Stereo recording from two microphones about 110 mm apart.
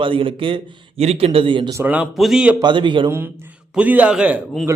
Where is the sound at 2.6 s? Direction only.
45° right (ahead or behind).